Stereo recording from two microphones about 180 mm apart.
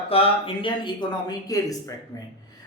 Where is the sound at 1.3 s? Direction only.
20° left (ahead or behind).